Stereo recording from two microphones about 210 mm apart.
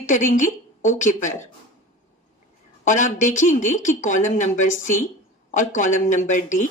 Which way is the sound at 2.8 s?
35° left (ahead or behind).